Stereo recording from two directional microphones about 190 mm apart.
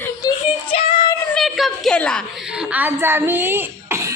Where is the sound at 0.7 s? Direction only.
25° left (ahead or behind).